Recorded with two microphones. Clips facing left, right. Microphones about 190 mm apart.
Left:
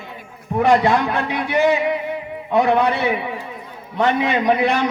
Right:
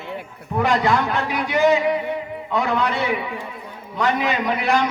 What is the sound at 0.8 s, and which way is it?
Speech, 25° left (ahead or behind).